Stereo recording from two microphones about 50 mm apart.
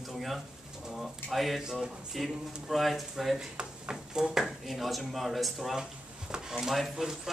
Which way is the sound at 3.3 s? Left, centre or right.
Centre.